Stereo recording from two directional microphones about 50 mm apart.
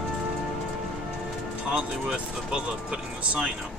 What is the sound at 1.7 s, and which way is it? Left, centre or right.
Speech, centre.